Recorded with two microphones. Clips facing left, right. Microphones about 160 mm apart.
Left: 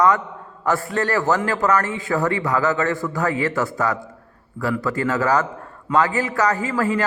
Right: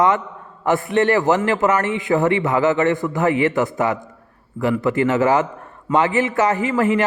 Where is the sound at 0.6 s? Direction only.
20° right (ahead or behind).